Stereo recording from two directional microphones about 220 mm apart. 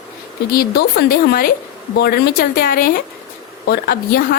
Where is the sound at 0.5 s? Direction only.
45° left (ahead or behind).